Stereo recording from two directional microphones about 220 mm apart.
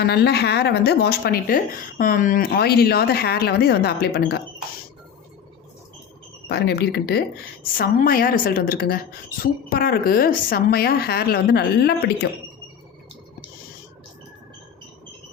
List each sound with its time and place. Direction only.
0.0 s a woman's voice: 45° left (ahead or behind)
6.5 s a woman's voice: 50° left (ahead or behind)